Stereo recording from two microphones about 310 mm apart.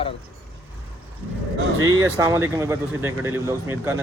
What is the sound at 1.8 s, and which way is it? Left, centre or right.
Speech, right.